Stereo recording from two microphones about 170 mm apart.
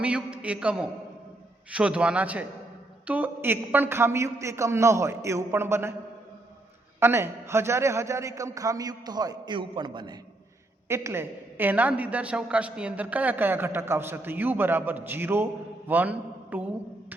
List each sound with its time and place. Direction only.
0.0 s a woman's voice: 5° right (ahead or behind)
7.0 s a man's voice: 15° right (ahead or behind)
10.8 s a woman's voice: 15° right (ahead or behind)